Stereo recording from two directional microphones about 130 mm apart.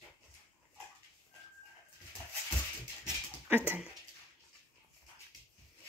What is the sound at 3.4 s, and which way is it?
Speech, 15° right (ahead or behind).